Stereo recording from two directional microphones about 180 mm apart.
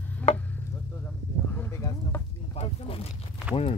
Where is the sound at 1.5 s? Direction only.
15° left (ahead or behind).